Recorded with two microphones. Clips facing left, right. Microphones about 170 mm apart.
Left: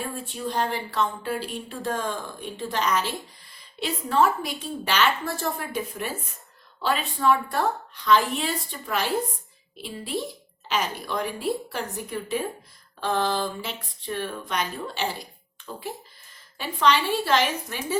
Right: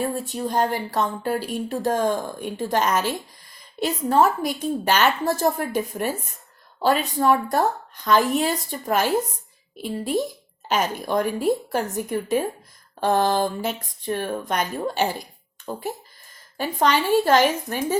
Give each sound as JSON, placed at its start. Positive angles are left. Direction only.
{"t": 0.1, "sound": "speech", "side_deg": -45}
{"t": 16.6, "sound": "speech", "side_deg": -45}